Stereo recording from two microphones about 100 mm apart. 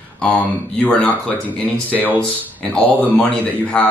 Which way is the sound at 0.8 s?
15° left (ahead or behind).